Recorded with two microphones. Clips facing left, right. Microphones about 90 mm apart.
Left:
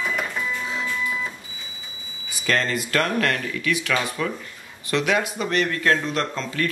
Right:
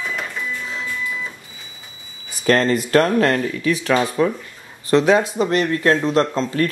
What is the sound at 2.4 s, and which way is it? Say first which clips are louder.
Speech: right 7 dB; 40° right (ahead or behind).